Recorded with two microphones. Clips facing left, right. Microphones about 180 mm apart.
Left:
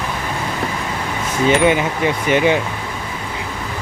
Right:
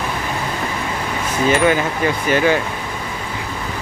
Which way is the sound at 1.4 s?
20° left (ahead or behind).